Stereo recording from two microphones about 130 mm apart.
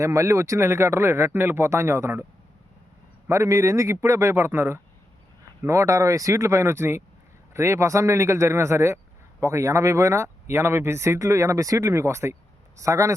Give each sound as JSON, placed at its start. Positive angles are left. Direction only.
{"t": 0.0, "sound": "speech", "side_deg": -25}
{"t": 3.2, "sound": "speech", "side_deg": -20}